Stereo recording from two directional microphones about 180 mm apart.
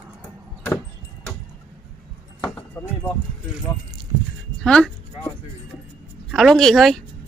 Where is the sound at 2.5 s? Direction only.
10° left (ahead or behind).